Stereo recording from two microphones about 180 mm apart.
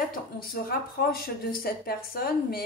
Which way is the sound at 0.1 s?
55° left (ahead or behind).